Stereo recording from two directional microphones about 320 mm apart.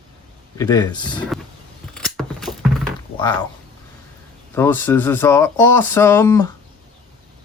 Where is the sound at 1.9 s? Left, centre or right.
Centre.